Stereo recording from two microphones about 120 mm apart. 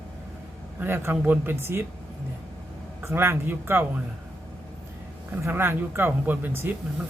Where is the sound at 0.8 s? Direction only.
20° right (ahead or behind).